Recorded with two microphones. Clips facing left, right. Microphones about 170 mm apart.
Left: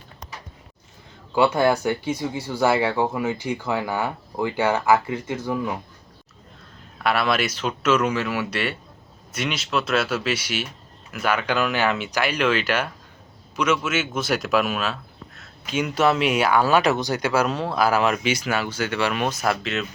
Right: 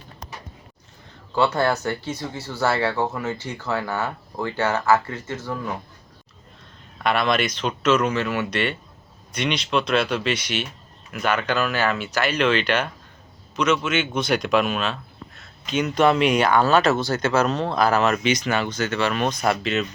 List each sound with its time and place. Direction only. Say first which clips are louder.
1.4 s speech: left 2 dB; 10° left (ahead or behind)
7.0 s speech: right 1 dB; 5° left (ahead or behind)